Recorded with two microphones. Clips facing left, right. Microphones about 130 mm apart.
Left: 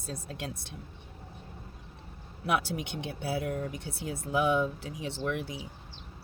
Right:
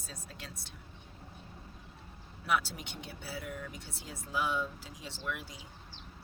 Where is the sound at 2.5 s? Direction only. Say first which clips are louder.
Left 3 dB; 65° left (ahead or behind).